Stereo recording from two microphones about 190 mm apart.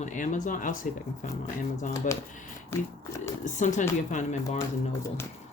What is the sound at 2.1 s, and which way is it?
Speech, 45° left (ahead or behind).